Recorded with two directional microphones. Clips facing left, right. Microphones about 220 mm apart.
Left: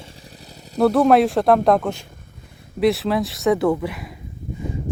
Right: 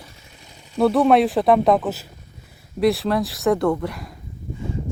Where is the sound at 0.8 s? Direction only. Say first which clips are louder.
Left 1 dB; centre (ahead or behind).